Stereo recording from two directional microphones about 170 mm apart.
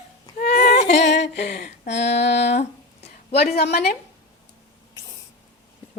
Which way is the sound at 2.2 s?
80° left.